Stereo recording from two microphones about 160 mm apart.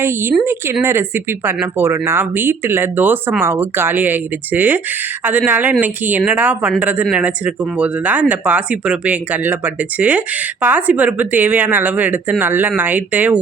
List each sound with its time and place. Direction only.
0.0 s speech: 15° right (ahead or behind)